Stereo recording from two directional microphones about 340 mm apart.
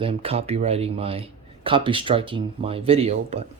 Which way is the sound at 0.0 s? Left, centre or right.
Centre.